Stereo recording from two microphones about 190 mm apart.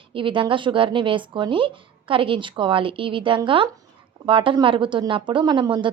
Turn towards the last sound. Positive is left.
turn(degrees=-25)  # may be behind; listen again after turning